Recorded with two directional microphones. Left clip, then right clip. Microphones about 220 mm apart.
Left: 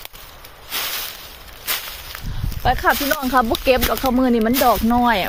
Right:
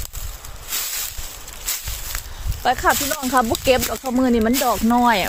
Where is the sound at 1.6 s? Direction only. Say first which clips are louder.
Left 3 dB; 20° right (ahead or behind).